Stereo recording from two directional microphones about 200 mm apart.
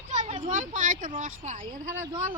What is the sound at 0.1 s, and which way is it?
A woman's voice, 35° right (ahead or behind).